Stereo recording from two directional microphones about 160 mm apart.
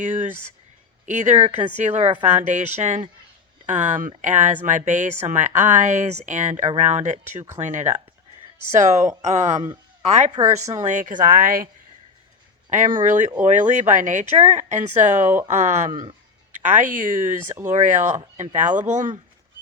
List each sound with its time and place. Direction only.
1.0 s speech: 50° right (ahead or behind)
12.7 s speech: 55° right (ahead or behind)
15.3 s speech: 15° right (ahead or behind)
16.6 s speech: 55° right (ahead or behind)